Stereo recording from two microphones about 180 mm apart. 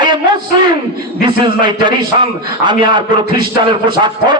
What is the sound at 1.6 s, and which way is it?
A man's voice, 25° right (ahead or behind).